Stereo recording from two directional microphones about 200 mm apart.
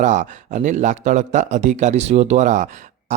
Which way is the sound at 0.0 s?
35° right (ahead or behind).